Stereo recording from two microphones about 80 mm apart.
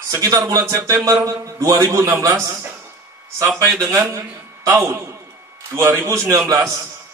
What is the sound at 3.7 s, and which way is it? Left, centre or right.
A man's voice, right.